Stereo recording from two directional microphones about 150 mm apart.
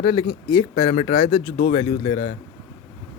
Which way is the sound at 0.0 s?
30° left (ahead or behind).